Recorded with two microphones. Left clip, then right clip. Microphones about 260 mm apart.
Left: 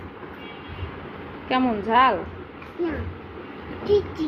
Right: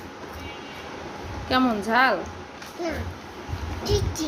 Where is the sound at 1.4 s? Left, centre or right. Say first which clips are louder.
Even; centre.